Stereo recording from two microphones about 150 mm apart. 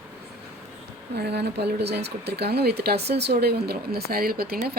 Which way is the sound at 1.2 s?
90° right.